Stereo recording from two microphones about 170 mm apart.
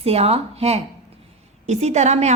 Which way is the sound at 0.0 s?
35° right (ahead or behind).